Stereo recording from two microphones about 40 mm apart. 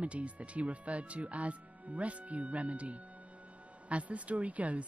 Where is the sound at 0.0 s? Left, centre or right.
Right.